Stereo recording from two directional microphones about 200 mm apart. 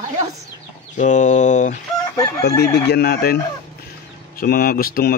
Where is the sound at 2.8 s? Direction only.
55° left (ahead or behind).